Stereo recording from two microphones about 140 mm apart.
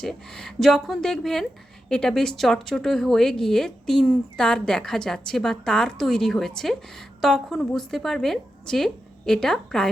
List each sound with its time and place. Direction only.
0.0 s speech: 5° left (ahead or behind)